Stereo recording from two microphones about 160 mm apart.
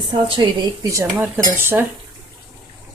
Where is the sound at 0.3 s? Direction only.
20° right (ahead or behind).